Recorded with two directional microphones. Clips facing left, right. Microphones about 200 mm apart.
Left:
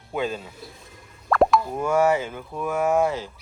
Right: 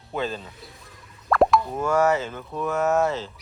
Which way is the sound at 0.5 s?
Centre (ahead or behind).